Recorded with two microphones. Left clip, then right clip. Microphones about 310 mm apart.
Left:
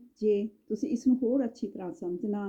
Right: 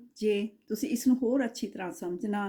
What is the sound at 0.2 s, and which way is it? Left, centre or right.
Speech, centre.